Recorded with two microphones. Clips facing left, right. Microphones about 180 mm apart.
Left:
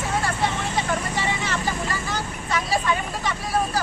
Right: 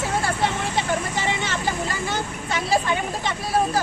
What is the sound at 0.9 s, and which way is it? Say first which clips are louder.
Vehicle: right 1 dB; 25° right (ahead or behind).